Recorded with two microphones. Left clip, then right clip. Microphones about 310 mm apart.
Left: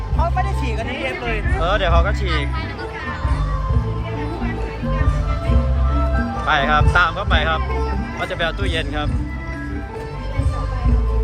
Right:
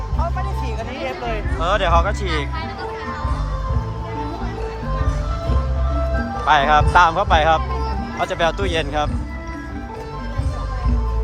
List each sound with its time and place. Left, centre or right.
1.0 s speech: centre
6.4 s speech: centre